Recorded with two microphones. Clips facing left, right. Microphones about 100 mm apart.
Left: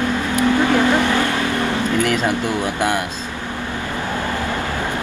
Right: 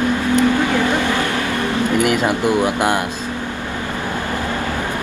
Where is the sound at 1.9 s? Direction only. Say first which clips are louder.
Right 4 dB; 15° right (ahead or behind).